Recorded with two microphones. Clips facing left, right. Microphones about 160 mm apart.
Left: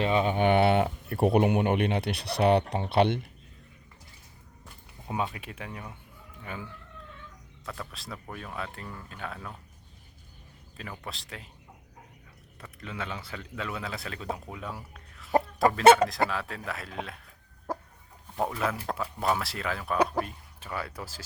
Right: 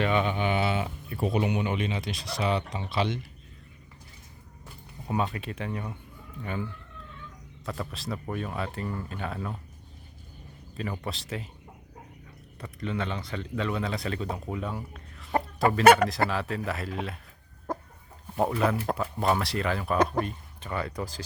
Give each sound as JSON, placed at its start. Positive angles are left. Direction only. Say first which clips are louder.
{"t": 0.0, "sound": "speech", "louder": "even", "side_deg": 35}
{"t": 0.3, "sound": "speech", "louder": "left 5 dB", "side_deg": 60}
{"t": 5.2, "sound": "a man's voice", "louder": "right 3 dB", "side_deg": 5}
{"t": 11.0, "sound": "a man's voice", "louder": "right 7 dB", "side_deg": 0}
{"t": 12.5, "sound": "a man's voice", "louder": "right 6 dB", "side_deg": 0}
{"t": 15.8, "sound": "speech", "louder": "even", "side_deg": 25}
{"t": 16.3, "sound": "a man's voice", "louder": "right 4 dB", "side_deg": 0}
{"t": 17.7, "sound": "chicken", "louder": "right 1 dB", "side_deg": 10}
{"t": 18.3, "sound": "a man's voice", "louder": "right 4 dB", "side_deg": -5}